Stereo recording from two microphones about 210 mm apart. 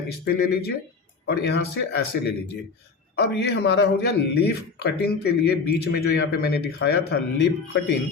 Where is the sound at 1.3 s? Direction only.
50° left (ahead or behind).